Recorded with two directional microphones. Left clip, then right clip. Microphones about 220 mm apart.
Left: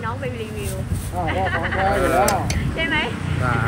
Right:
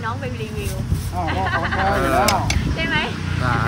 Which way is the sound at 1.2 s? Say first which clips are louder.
Right 1 dB; 45° right (ahead or behind).